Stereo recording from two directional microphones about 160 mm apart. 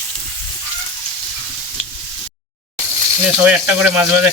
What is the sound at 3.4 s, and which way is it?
Speech, 10° right (ahead or behind).